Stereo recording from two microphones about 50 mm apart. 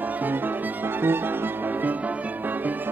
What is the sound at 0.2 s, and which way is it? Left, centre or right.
Music, right.